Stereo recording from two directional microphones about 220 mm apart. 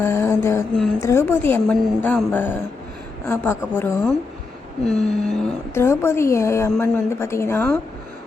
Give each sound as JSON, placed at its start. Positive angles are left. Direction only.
{"t": 0.0, "sound": "mantra", "side_deg": 10}
{"t": 1.0, "sound": "a woman's voice", "side_deg": 10}